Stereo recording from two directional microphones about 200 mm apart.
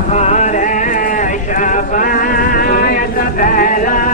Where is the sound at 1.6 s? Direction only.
40° left (ahead or behind).